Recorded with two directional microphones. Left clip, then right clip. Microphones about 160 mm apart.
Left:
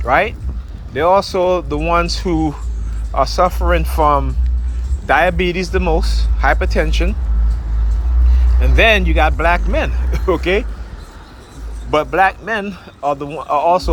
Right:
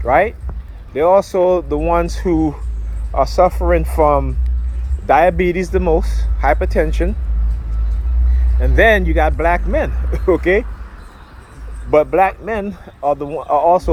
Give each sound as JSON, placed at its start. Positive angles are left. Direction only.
{"t": 0.0, "sound": "speech", "side_deg": -55}
{"t": 5.0, "sound": "speech", "side_deg": -55}
{"t": 8.6, "sound": "speech", "side_deg": -60}
{"t": 11.9, "sound": "speech", "side_deg": -55}